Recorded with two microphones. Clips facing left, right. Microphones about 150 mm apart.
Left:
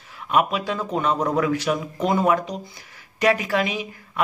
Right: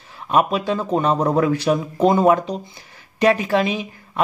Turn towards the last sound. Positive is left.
turn(degrees=-30)  # may be behind; listen again after turning